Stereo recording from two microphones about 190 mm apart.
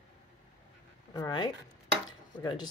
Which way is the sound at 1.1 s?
20° left (ahead or behind).